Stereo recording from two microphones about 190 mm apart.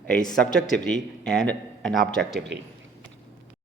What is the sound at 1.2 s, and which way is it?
A man's voice, 5° left (ahead or behind).